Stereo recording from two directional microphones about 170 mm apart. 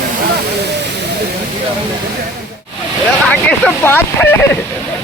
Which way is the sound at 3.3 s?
5° left (ahead or behind).